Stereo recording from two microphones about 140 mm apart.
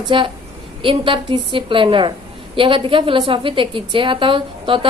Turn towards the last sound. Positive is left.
turn(degrees=-40)  # may be behind; listen again after turning